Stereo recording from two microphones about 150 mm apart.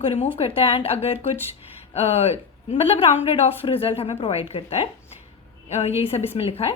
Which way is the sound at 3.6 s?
40° left (ahead or behind).